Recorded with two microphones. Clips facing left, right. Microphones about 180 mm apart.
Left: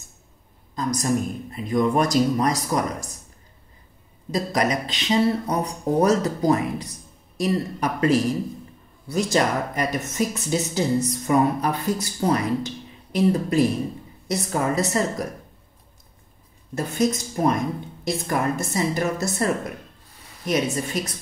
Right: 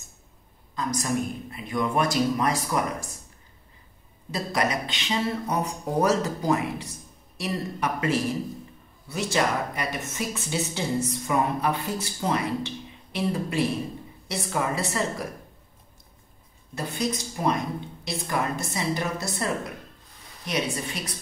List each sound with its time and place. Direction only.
0.7 s speech: 40° left (ahead or behind)
4.3 s speech: 40° left (ahead or behind)
16.7 s a woman's voice: 45° left (ahead or behind)
20.4 s a woman's voice: 45° left (ahead or behind)